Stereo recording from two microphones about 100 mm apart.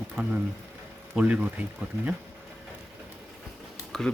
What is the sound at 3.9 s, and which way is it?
Speech, 5° left (ahead or behind).